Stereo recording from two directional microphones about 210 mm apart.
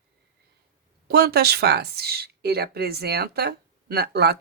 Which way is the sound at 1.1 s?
50° right (ahead or behind).